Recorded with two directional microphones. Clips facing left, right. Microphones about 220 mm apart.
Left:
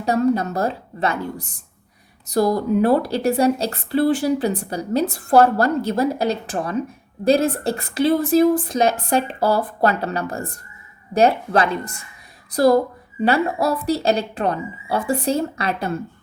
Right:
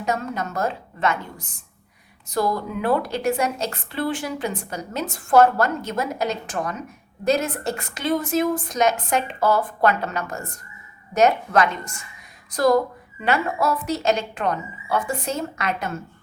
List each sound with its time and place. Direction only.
0.0 s speech: 35° left (ahead or behind)
2.3 s speech: 40° left (ahead or behind)